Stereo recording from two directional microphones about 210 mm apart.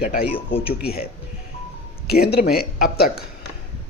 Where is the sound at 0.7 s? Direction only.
45° left (ahead or behind).